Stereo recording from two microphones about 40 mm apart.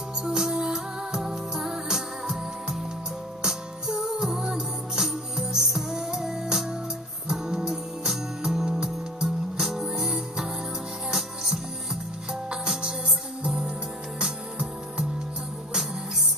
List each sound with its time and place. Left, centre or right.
0.2 s music: centre